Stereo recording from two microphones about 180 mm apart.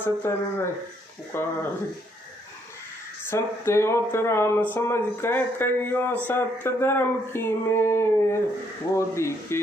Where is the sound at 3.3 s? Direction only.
15° left (ahead or behind).